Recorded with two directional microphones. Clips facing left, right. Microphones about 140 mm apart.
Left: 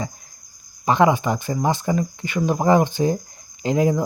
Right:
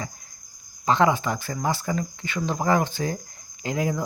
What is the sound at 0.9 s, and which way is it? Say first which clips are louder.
Speech: left 4 dB; 15° left (ahead or behind).